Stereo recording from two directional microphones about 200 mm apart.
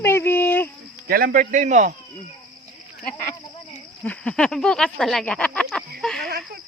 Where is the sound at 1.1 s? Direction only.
50° right (ahead or behind).